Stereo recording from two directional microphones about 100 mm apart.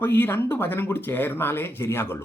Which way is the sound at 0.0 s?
20° left (ahead or behind).